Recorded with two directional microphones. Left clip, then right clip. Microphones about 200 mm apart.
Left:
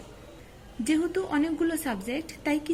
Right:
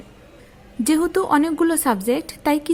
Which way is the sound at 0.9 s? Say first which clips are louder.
Right 9 dB; 35° right (ahead or behind).